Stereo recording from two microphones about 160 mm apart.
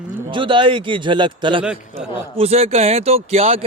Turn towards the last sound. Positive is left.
turn(degrees=-40)  # may be behind; listen again after turning